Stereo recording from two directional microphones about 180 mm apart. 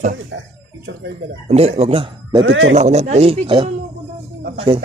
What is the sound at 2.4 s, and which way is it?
Speech, 90° right.